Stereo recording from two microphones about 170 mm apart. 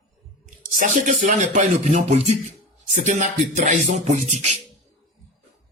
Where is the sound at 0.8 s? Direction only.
50° right (ahead or behind).